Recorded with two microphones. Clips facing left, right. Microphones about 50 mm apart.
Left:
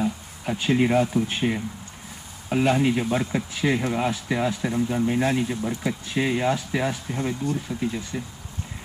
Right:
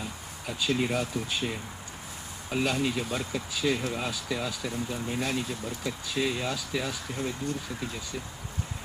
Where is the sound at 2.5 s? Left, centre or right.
Left.